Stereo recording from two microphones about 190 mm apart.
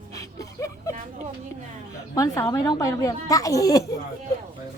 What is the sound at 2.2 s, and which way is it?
Speech, 15° left (ahead or behind).